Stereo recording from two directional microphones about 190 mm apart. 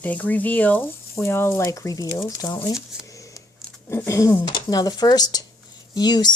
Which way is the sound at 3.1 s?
15° left (ahead or behind).